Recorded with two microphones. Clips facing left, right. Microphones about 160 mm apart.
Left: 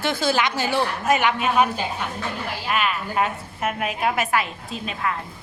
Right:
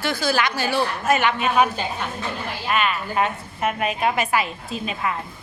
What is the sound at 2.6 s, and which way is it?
A woman's voice, 5° left (ahead or behind).